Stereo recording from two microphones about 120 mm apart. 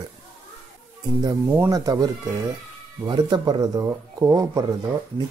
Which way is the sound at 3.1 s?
35° right (ahead or behind).